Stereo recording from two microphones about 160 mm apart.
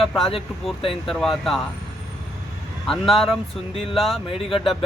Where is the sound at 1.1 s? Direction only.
Centre (ahead or behind).